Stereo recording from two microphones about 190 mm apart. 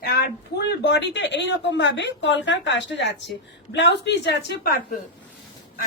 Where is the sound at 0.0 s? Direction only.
55° left (ahead or behind).